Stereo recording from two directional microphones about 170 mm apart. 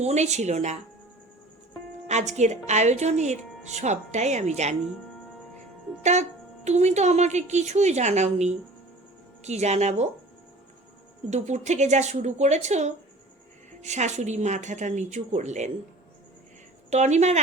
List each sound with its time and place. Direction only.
0.0 s a woman's voice: 40° right (ahead or behind)
2.0 s speech: 40° right (ahead or behind)
6.0 s a woman's voice: 40° right (ahead or behind)
11.3 s speech: 40° right (ahead or behind)
16.9 s speech: 40° right (ahead or behind)